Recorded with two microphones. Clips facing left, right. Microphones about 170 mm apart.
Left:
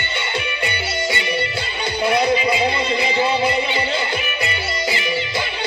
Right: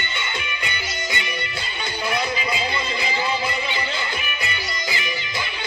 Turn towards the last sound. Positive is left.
turn(degrees=30)  # may be behind; listen again after turning